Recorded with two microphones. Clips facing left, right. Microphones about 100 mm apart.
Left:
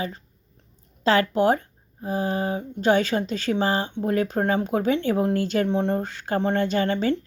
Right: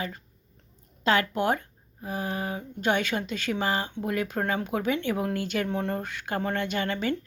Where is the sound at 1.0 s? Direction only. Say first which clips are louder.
Left 5 dB; 35° left (ahead or behind).